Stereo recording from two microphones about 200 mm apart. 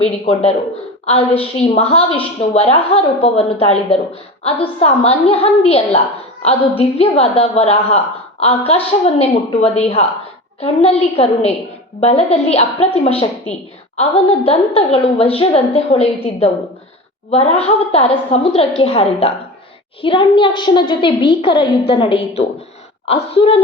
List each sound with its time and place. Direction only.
0.0 s a woman's voice: 30° left (ahead or behind)
1.6 s a child's voice: 30° left (ahead or behind)